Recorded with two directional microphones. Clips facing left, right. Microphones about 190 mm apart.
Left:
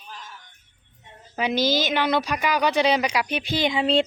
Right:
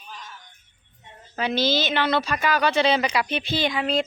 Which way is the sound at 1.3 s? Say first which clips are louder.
Left 1 dB; 15° left (ahead or behind).